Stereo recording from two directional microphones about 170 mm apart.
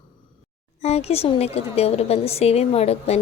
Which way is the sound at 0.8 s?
40° left (ahead or behind).